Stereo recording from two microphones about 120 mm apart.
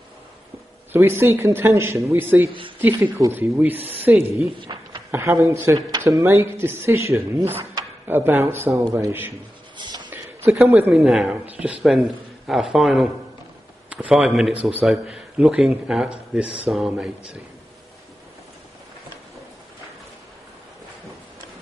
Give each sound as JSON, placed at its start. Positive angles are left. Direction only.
{"t": 0.9, "sound": "speech", "side_deg": -20}
{"t": 4.6, "sound": "a sound", "side_deg": -40}
{"t": 5.1, "sound": "speech", "side_deg": -25}
{"t": 5.8, "sound": "speech", "side_deg": -35}
{"t": 9.8, "sound": "music", "side_deg": -35}
{"t": 10.0, "sound": "a sound", "side_deg": -20}
{"t": 10.7, "sound": "speech", "side_deg": -15}